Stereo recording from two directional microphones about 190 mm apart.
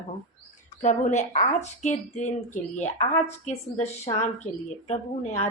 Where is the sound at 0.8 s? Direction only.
40° left (ahead or behind).